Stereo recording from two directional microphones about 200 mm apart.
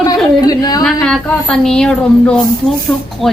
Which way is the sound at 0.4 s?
20° left (ahead or behind).